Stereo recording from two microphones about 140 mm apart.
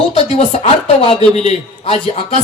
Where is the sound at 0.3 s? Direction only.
50° left (ahead or behind).